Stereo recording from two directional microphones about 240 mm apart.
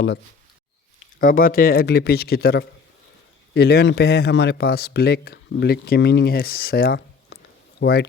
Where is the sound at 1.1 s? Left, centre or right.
Left.